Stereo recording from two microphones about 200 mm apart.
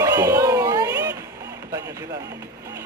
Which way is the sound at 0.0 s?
15° right (ahead or behind).